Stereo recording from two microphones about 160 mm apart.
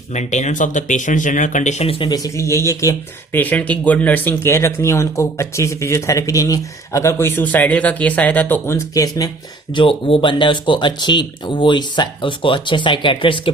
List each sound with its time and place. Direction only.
0.1 s speech: 45° left (ahead or behind); by 9.3 s 20° left (ahead or behind)
9.7 s speech: 35° left (ahead or behind)